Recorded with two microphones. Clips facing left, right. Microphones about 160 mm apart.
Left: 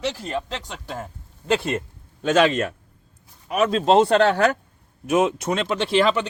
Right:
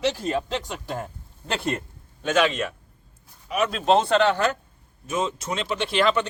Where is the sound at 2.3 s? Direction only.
45° left (ahead or behind).